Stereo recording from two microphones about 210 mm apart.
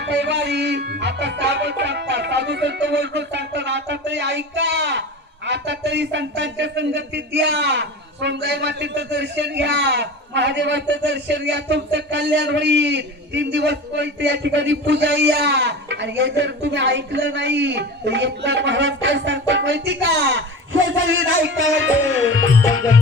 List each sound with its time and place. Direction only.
0.0 s speech: 55° right (ahead or behind)